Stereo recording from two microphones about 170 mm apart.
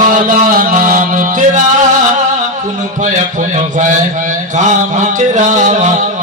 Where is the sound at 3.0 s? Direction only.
50° right (ahead or behind).